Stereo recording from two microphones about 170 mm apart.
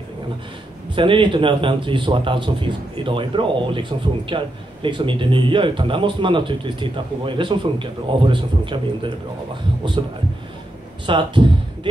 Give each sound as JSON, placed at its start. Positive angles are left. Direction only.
{"t": 0.9, "sound": "a man's voice", "side_deg": -30}
{"t": 11.1, "sound": "speech", "side_deg": -30}